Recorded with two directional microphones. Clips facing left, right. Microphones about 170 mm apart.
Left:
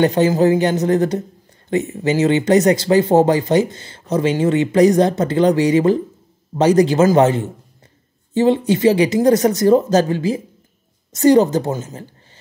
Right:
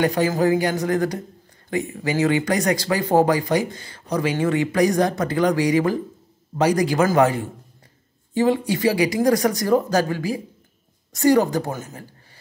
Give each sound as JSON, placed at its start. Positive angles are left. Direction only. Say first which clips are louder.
{"t": 0.0, "sound": "speech", "louder": "left 5 dB", "side_deg": 25}